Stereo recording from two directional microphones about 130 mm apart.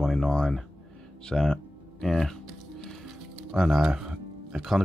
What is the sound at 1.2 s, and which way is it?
Music, 5° left (ahead or behind).